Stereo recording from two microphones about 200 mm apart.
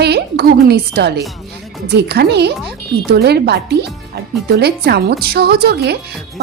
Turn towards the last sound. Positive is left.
turn(degrees=-55)  # may be behind; listen again after turning